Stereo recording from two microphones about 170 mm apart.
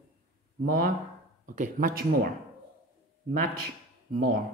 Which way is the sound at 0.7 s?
55° right (ahead or behind).